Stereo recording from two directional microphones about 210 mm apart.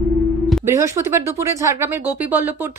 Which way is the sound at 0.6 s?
10° right (ahead or behind).